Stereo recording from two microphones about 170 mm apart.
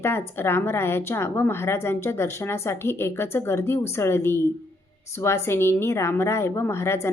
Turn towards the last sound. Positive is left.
turn(degrees=15)  # may be behind; listen again after turning